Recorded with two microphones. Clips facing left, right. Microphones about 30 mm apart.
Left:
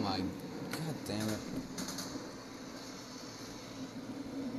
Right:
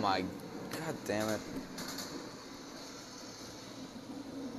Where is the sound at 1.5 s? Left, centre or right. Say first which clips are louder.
Left 1 dB; right.